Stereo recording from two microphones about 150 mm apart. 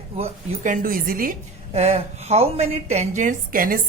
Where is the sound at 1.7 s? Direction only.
45° right (ahead or behind).